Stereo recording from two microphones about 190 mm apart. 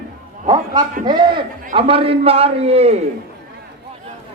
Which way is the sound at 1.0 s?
20° right (ahead or behind).